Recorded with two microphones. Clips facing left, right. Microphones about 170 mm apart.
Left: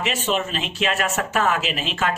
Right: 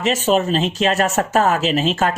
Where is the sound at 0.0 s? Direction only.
40° right (ahead or behind).